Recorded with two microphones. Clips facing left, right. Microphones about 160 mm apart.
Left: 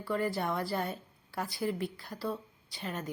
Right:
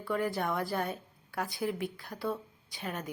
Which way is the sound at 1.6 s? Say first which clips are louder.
Left 2 dB; 5° right (ahead or behind).